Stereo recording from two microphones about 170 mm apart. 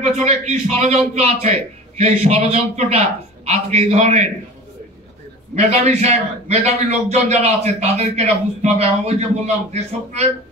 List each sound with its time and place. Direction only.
0.0 s a man's voice: 40° right (ahead or behind)
5.6 s a man's voice: 40° right (ahead or behind)